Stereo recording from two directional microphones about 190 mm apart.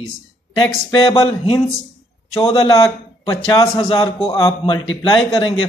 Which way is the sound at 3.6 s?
25° left (ahead or behind).